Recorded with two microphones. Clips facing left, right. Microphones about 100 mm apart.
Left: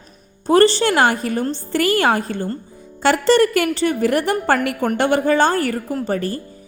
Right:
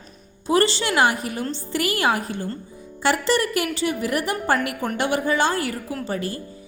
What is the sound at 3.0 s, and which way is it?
A woman's voice, 60° left (ahead or behind).